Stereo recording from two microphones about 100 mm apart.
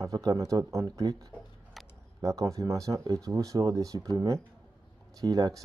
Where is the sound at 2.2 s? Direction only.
35° right (ahead or behind).